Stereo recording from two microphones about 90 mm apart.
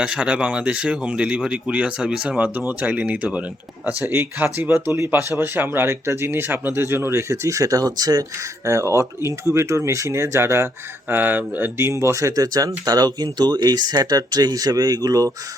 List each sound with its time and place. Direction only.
0.0 s speech: 10° right (ahead or behind)
4.0 s speech: 25° right (ahead or behind); by 8.2 s 45° right (ahead or behind)
8.6 s speech: 35° right (ahead or behind)